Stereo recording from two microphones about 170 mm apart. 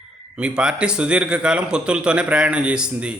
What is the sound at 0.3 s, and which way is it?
A man's voice, 5° right (ahead or behind).